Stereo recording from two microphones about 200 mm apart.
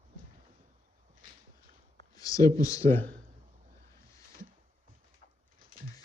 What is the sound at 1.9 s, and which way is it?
A man's voice, 20° left (ahead or behind).